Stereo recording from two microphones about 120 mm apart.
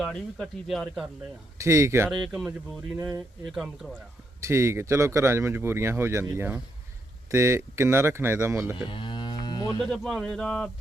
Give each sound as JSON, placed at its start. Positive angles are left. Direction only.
{"t": 0.0, "sound": "speech", "side_deg": 5}
{"t": 1.5, "sound": "speech", "side_deg": -25}
{"t": 3.4, "sound": "speech", "side_deg": 0}
{"t": 4.4, "sound": "speech", "side_deg": -25}
{"t": 8.9, "sound": "livestock", "side_deg": 45}
{"t": 9.8, "sound": "speech", "side_deg": 5}